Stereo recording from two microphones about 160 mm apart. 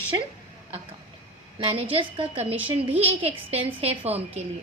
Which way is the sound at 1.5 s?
30° right (ahead or behind).